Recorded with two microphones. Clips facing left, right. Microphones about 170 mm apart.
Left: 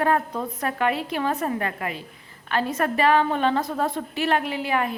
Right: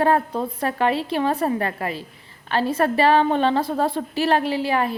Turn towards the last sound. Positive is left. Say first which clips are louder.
# right 3 dB
turn(degrees=-30)  # may be behind; listen again after turning